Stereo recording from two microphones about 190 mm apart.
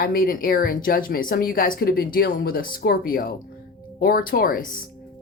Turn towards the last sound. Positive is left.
turn(degrees=50)  # may be behind; listen again after turning